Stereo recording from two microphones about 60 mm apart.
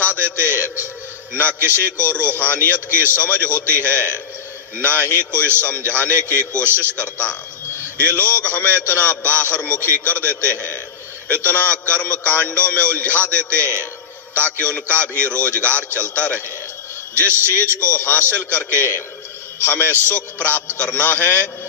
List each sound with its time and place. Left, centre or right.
0.2 s music: left
1.3 s a man's voice: left